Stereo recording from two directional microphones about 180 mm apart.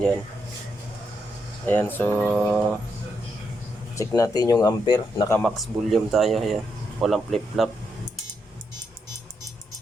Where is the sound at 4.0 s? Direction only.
15° left (ahead or behind).